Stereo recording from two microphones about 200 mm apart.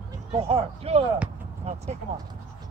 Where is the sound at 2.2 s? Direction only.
20° right (ahead or behind).